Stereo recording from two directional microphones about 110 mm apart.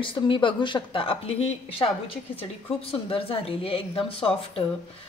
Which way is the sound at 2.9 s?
55° left (ahead or behind).